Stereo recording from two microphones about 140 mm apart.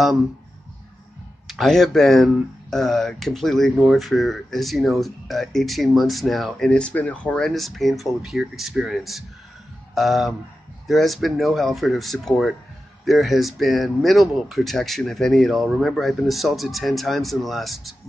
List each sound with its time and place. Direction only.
1.5 s speech: centre (ahead or behind)